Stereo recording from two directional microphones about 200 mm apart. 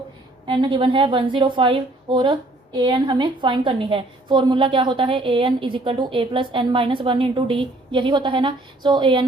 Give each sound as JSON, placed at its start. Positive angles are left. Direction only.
{"t": 0.4, "sound": "a woman's voice", "side_deg": -25}